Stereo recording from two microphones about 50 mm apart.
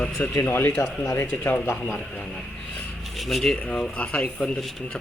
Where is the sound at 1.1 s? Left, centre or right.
Left.